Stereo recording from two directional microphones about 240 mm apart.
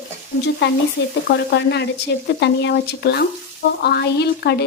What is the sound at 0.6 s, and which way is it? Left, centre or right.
A woman's voice, left.